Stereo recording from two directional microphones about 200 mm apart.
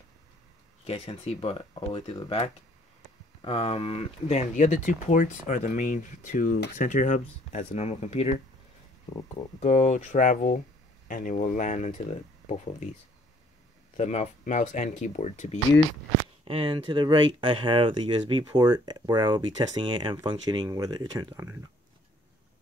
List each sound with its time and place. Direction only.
0.8 s speech: 30° left (ahead or behind)
9.1 s speech: 20° left (ahead or behind)
9.6 s speech: 35° left (ahead or behind)
13.9 s speech: 35° left (ahead or behind)
16.4 s speech: 25° right (ahead or behind)